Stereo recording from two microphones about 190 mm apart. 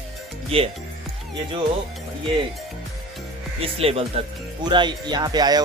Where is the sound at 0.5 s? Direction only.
30° right (ahead or behind).